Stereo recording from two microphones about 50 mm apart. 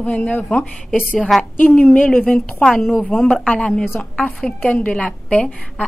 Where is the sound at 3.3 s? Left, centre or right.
Left.